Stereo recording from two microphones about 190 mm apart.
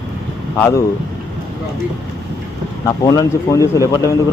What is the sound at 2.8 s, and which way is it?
Speech, 20° left (ahead or behind).